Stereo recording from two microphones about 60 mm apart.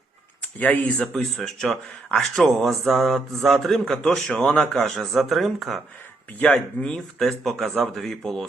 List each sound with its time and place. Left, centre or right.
0.6 s speech: left
1.0 s a man's voice: centre
6.7 s speech: centre
7.2 s a man's voice: centre